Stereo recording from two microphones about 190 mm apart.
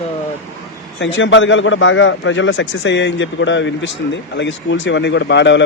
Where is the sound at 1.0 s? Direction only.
75° left (ahead or behind).